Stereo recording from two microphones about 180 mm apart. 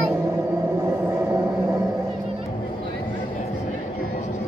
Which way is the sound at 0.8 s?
15° right (ahead or behind).